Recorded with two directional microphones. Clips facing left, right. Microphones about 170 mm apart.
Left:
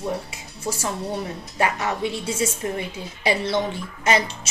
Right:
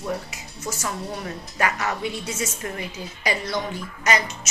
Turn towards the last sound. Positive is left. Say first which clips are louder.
# left 2 dB
turn(degrees=25)  # may be behind; listen again after turning